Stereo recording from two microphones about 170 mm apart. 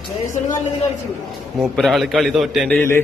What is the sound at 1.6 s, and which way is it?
A man's voice, centre (ahead or behind).